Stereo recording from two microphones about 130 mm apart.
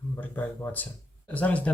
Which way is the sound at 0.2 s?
15° left (ahead or behind).